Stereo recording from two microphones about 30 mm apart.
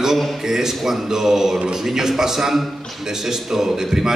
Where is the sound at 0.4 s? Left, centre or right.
Centre.